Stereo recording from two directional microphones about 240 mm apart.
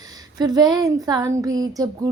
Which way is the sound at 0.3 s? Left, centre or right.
Centre.